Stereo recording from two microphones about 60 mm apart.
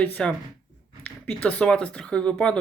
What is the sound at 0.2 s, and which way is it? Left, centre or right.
Speech, centre.